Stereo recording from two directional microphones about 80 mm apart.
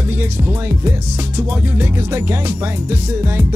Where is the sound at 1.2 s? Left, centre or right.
Right.